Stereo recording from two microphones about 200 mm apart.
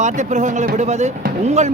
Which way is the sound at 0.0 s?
35° right (ahead or behind).